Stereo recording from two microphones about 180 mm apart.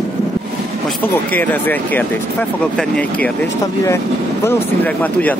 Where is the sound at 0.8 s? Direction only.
10° left (ahead or behind).